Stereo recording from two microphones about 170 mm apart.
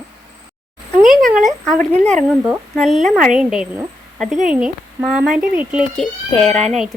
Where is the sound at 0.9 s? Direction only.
Centre (ahead or behind).